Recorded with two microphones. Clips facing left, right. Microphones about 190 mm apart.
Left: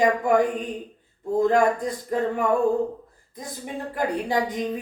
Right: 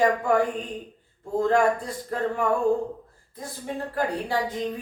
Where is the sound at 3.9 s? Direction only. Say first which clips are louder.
Left 3 dB; 15° left (ahead or behind).